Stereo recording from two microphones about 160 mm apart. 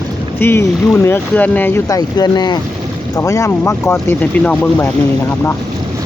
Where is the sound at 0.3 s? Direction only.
15° left (ahead or behind).